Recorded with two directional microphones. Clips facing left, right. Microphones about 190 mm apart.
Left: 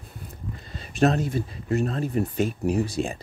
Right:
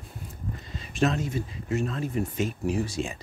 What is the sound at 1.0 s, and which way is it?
Speech, 35° left (ahead or behind).